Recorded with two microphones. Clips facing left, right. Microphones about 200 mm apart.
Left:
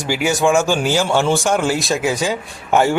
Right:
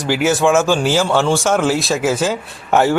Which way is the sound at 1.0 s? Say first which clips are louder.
Right 1 dB; 15° left (ahead or behind).